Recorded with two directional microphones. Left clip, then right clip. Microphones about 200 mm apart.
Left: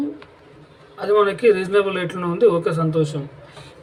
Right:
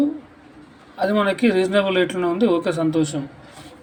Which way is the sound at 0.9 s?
15° right (ahead or behind).